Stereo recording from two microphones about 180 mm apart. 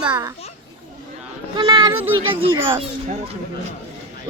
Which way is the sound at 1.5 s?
25° right (ahead or behind).